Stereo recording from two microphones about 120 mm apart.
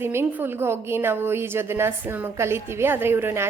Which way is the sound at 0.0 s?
20° right (ahead or behind).